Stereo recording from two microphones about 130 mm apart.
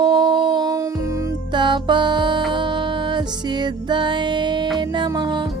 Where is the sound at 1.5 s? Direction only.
35° right (ahead or behind).